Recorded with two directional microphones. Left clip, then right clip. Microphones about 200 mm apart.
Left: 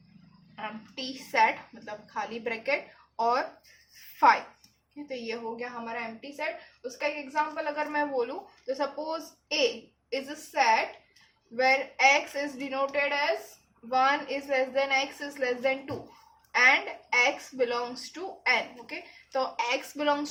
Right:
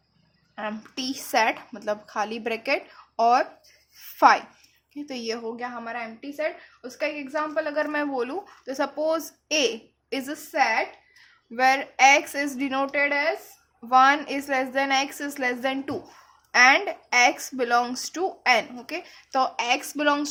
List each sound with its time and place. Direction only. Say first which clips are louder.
0.5 s a woman's voice: right 6 dB; 50° right (ahead or behind)
5.0 s a woman's voice: right 4 dB; 50° right (ahead or behind); by 10.8 s 35° right (ahead or behind)
11.5 s a woman's voice: right 4 dB; 45° right (ahead or behind)
13.9 s a woman's voice: right 7 dB; 45° right (ahead or behind)